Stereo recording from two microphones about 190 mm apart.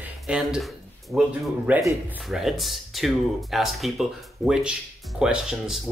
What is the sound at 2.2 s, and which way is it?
Speech, centre (ahead or behind).